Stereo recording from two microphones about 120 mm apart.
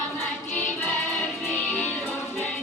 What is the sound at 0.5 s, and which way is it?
Music, 15° left (ahead or behind).